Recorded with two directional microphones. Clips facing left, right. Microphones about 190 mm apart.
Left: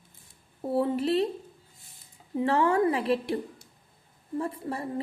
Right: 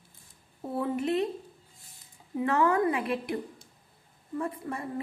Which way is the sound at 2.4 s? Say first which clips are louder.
Left 2 dB; 30° left (ahead or behind).